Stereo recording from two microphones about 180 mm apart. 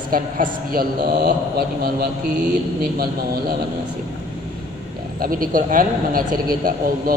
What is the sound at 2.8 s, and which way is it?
Speech, 55° right (ahead or behind).